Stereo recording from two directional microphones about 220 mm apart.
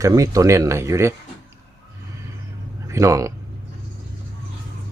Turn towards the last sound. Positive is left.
turn(degrees=-15)  # may be behind; listen again after turning